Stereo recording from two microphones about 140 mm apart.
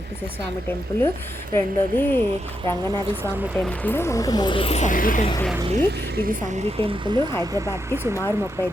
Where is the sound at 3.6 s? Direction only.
15° left (ahead or behind); by 4.9 s 50° left (ahead or behind).